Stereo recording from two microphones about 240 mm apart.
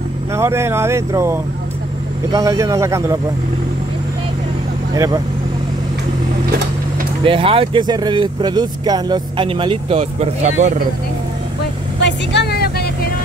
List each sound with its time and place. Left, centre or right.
0.4 s speech: centre
4.9 s speech: centre
7.2 s speech: right
12.0 s vehicle: left